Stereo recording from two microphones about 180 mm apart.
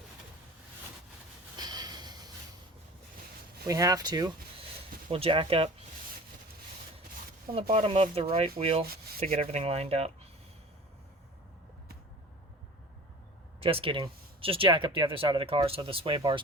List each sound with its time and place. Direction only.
1.5 s snort: 20° right (ahead or behind)
3.7 s speech: 20° right (ahead or behind)
7.5 s speech: 25° right (ahead or behind)
13.6 s speech: 30° right (ahead or behind)